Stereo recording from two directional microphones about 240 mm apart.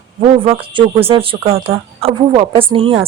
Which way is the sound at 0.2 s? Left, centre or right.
Right.